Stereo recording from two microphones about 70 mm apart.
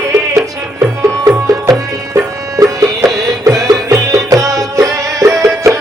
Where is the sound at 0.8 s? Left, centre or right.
Right.